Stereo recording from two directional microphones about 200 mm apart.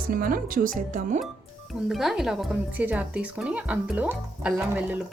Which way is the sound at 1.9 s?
Centre (ahead or behind).